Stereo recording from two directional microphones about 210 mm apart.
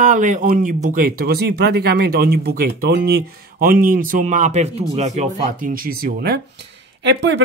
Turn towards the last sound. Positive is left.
turn(degrees=-55)  # may be behind; listen again after turning